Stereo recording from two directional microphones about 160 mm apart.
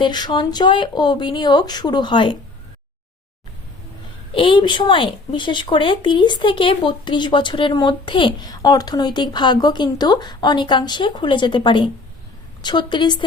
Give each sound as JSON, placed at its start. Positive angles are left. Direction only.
{"t": 0.0, "sound": "speech", "side_deg": 30}
{"t": 4.3, "sound": "speech", "side_deg": 35}